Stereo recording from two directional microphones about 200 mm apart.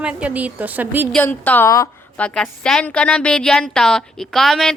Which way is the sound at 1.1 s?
10° left (ahead or behind).